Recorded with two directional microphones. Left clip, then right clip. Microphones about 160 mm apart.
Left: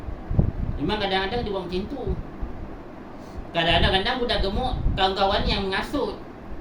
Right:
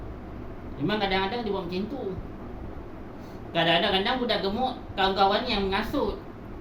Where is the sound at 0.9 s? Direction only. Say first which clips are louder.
Left 2 dB; 75° left (ahead or behind).